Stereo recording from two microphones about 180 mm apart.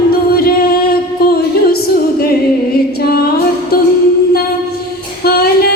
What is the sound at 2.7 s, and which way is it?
Music, 60° left (ahead or behind).